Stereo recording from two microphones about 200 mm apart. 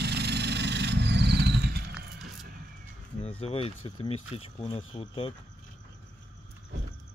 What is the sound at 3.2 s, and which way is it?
Speech, 30° left (ahead or behind).